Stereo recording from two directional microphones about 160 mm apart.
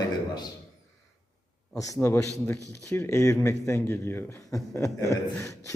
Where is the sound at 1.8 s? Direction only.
20° left (ahead or behind).